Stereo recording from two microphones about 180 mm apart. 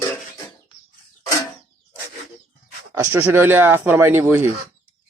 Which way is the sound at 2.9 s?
15° right (ahead or behind).